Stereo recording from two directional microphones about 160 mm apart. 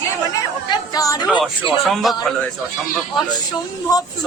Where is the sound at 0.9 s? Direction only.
20° left (ahead or behind).